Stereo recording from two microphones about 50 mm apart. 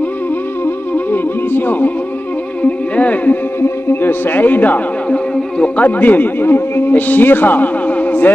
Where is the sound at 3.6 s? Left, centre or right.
Left.